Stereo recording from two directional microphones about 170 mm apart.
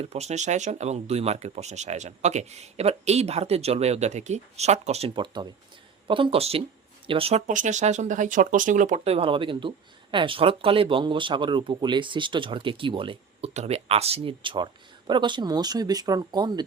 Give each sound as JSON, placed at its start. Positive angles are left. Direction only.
{"t": 0.0, "sound": "speech", "side_deg": -40}
{"t": 9.1, "sound": "speech", "side_deg": -30}